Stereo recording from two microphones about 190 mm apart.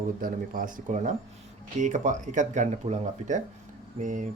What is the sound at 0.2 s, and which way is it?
Speech, 50° right (ahead or behind).